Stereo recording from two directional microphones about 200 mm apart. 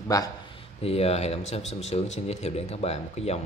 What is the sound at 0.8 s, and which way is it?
Speech, 30° left (ahead or behind).